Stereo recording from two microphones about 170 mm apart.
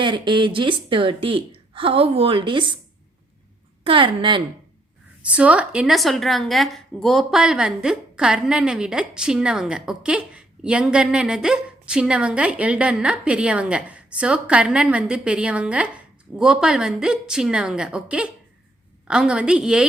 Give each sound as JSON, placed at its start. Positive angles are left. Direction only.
{"t": 0.0, "sound": "a woman's voice", "side_deg": -30}
{"t": 3.8, "sound": "a woman's voice", "side_deg": -30}
{"t": 5.2, "sound": "a woman's voice", "side_deg": -5}